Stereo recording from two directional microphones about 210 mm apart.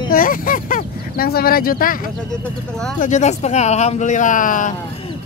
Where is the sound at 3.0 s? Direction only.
35° left (ahead or behind).